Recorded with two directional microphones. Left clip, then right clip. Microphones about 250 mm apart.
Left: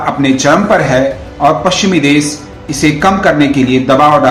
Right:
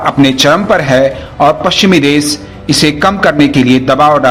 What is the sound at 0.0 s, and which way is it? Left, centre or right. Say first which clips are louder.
A man's voice: right 3 dB; right.